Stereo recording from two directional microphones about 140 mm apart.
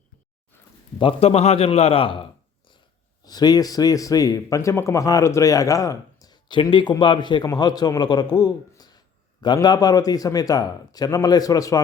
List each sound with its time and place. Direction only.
0.9 s a man's voice: 40° left (ahead or behind)
3.2 s a man's voice: 30° left (ahead or behind)